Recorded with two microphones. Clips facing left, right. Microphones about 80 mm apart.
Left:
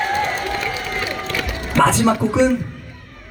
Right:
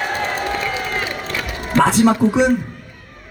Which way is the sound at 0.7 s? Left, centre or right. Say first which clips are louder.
Right 1 dB; right.